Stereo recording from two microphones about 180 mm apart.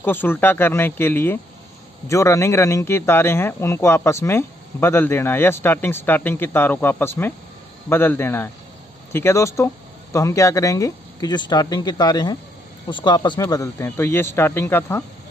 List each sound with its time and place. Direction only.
0.0 s speech: 10° left (ahead or behind)